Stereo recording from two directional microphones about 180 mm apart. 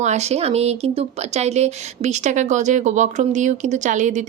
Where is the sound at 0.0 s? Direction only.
40° right (ahead or behind).